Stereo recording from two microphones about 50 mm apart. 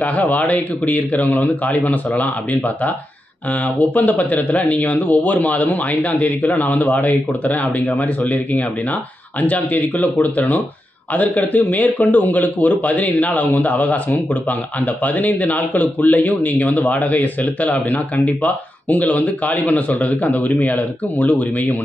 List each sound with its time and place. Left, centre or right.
0.0 s speech: left